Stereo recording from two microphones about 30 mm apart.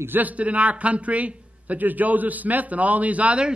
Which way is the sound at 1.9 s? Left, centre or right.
Right.